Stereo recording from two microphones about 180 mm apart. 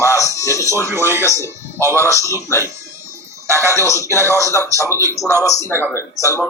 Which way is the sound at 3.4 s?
15° right (ahead or behind).